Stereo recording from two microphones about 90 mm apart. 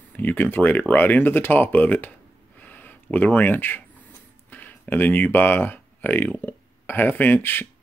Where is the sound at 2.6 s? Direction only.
20° left (ahead or behind).